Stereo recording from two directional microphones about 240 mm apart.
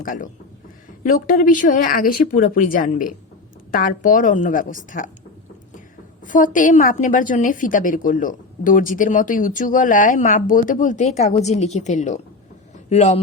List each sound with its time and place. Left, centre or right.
0.0 s a woman's voice: left
6.2 s a woman's voice: left